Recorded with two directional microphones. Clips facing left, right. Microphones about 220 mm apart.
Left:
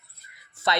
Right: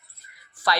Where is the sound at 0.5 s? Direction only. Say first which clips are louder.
Even; 25° left (ahead or behind).